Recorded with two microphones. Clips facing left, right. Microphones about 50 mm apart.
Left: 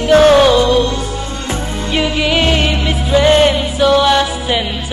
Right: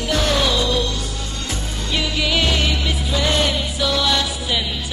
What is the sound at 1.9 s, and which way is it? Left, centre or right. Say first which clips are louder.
Music: left 6 dB; left.